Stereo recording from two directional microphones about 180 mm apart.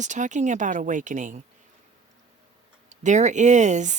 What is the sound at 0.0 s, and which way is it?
Speech, 40° right (ahead or behind).